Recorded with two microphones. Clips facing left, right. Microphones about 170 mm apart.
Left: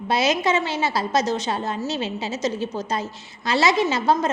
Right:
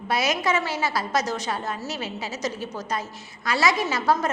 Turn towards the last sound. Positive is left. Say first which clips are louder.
# left 3 dB
turn(degrees=25)  # may be behind; listen again after turning